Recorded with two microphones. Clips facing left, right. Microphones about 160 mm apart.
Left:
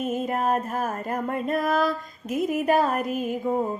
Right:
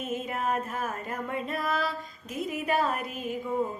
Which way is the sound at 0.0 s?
45° left (ahead or behind).